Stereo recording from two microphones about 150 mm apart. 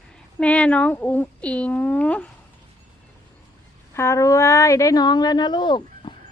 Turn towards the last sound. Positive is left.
turn(degrees=30)  # may be behind; listen again after turning